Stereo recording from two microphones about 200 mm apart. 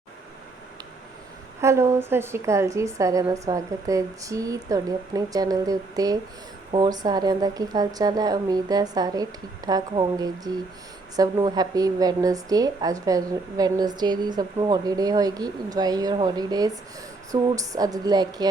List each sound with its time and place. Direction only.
1.6 s a woman's voice: 15° right (ahead or behind)